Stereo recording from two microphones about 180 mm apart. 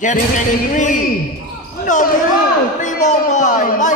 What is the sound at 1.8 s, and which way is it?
Basketball bounce, 45° left (ahead or behind).